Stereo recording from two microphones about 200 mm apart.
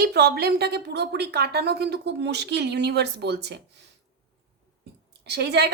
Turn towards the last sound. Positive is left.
turn(degrees=-55)  # may be behind; listen again after turning